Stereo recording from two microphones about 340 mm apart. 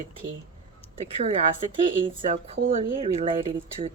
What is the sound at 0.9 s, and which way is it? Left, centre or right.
Speech, centre.